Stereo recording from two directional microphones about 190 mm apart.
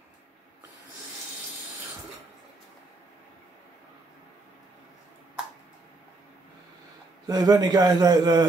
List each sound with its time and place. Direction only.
7.2 s a man's voice: 20° right (ahead or behind)